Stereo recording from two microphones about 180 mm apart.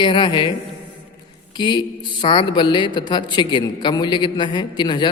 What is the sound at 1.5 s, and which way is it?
A man's voice, 25° left (ahead or behind).